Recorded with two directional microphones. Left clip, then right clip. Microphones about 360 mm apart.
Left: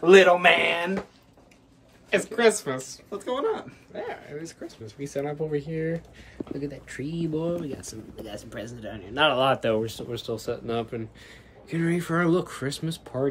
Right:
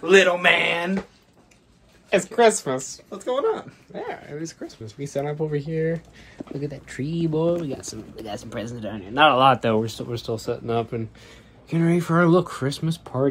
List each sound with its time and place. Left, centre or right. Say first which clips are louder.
0.0 s speech: left 1 dB; left
0.4 s speech: right 1 dB; centre
2.3 s speech: right 4 dB; centre
3.9 s speech: right 2 dB; centre
11.9 s speech: right 6 dB; centre